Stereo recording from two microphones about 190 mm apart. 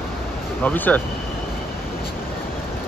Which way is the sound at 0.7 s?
10° left (ahead or behind).